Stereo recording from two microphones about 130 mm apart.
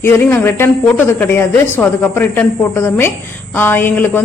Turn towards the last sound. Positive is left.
turn(degrees=15)  # may be behind; listen again after turning